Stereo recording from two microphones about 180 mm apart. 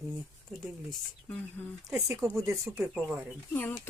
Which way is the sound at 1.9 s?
15° right (ahead or behind).